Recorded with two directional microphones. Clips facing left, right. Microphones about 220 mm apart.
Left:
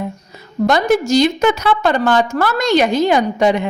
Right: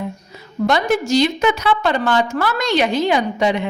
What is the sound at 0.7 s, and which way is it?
A woman's voice, 40° left (ahead or behind).